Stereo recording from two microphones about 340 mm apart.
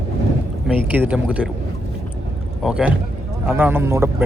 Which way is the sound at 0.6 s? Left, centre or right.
Centre.